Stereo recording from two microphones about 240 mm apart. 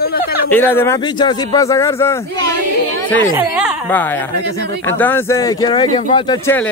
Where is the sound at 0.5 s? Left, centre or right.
Centre.